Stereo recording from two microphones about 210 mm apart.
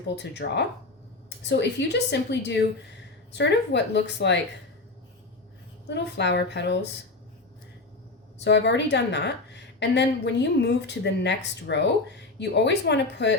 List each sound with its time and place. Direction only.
0.2 s a woman's voice: 55° left (ahead or behind)
5.9 s a woman's voice: 55° left (ahead or behind)
8.4 s a woman's voice: 55° left (ahead or behind)